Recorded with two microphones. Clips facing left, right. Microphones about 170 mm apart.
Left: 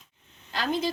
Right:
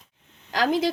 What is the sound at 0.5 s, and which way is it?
Speech, 90° right.